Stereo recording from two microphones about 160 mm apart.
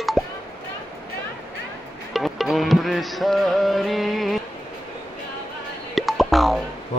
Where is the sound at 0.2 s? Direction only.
Centre (ahead or behind).